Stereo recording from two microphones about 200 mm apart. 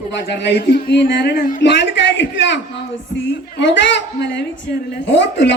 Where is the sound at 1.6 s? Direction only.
60° left (ahead or behind).